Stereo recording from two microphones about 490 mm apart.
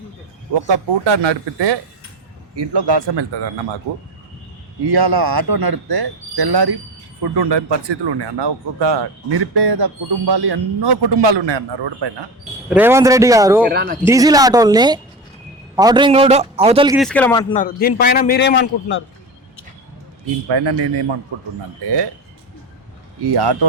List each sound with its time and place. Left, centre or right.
0.7 s speech: right
4.9 s speech: right
12.7 s a man's voice: centre
13.7 s a man's voice: centre
14.0 s a man's voice: centre
17.5 s a man's voice: centre
20.5 s speech: right
23.2 s speech: right